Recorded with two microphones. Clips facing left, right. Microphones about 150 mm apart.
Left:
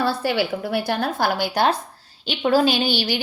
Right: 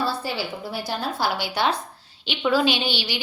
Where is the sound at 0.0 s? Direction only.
70° left (ahead or behind).